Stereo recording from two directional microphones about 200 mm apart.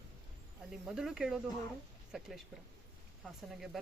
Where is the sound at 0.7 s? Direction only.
5° right (ahead or behind).